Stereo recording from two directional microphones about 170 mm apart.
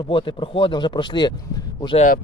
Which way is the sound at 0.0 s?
30° left (ahead or behind).